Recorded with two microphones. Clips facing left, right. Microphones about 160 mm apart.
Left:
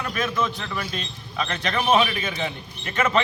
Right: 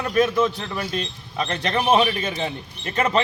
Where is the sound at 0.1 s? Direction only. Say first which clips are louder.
Right 8 dB; 35° right (ahead or behind).